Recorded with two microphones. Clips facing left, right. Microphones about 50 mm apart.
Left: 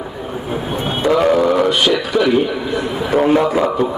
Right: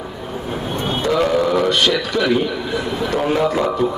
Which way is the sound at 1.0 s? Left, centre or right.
Centre.